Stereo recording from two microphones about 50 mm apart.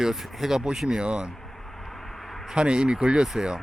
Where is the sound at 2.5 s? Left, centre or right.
Centre.